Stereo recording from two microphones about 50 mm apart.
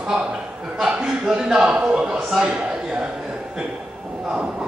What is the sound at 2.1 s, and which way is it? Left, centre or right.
Speech, centre.